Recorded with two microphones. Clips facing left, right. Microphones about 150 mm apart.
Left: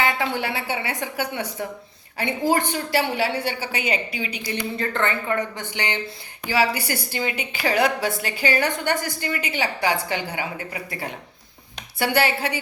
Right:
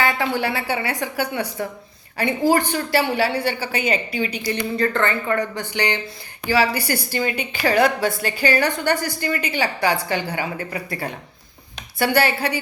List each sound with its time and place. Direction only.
0.0 s a woman's voice: 20° left (ahead or behind)
2.5 s a woman's voice: 20° left (ahead or behind)